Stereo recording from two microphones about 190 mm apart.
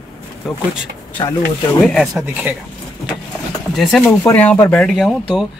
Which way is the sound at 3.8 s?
Centre (ahead or behind).